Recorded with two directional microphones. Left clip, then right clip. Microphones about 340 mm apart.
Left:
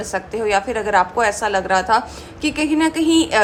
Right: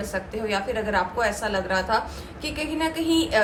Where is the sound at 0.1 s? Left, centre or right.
Centre.